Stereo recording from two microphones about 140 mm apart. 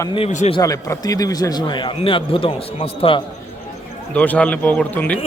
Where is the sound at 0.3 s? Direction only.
55° left (ahead or behind).